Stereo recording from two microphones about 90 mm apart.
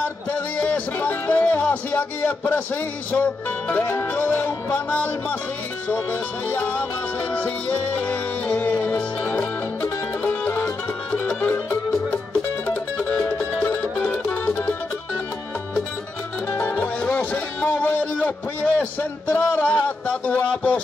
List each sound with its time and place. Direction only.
0.3 s speech: 15° left (ahead or behind)
5.9 s music: 25° left (ahead or behind)
10.2 s music: 20° left (ahead or behind)
12.6 s music: 15° left (ahead or behind)
16.4 s music: 20° left (ahead or behind)